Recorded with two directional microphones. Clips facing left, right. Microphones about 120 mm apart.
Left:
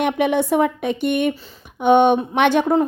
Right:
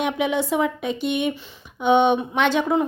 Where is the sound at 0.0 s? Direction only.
55° left (ahead or behind).